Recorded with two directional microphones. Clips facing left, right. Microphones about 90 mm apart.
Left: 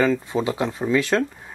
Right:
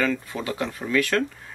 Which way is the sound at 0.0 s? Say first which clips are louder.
Left 5 dB; 20° left (ahead or behind).